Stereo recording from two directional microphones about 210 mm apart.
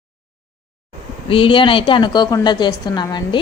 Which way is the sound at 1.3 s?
25° left (ahead or behind).